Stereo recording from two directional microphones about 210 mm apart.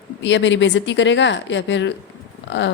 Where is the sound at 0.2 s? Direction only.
60° left (ahead or behind).